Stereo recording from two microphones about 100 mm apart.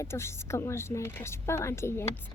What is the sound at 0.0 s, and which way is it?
A woman's voice, 25° left (ahead or behind).